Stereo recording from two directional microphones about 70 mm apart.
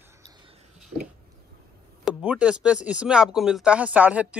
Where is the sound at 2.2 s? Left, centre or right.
Centre.